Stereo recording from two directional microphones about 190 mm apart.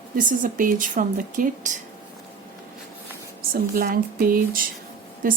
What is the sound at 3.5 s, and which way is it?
Speech, 50° right (ahead or behind).